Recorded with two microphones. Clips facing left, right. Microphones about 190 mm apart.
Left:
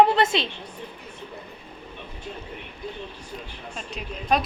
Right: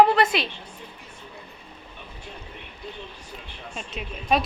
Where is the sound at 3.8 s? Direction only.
Centre (ahead or behind).